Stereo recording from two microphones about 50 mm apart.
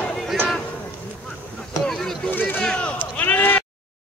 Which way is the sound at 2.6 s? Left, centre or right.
Centre.